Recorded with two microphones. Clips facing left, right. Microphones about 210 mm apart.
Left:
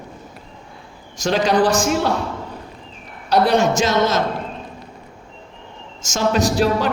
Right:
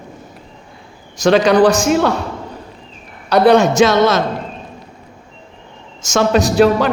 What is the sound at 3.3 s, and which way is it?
Speech, 65° right (ahead or behind).